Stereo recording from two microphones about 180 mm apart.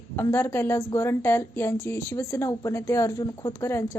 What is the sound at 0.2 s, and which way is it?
A woman's voice, 15° left (ahead or behind).